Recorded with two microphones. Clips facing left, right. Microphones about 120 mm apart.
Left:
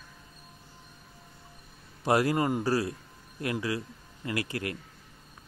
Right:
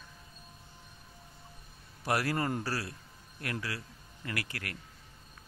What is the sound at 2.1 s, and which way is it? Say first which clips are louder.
Speech: left 6 dB; 20° left (ahead or behind).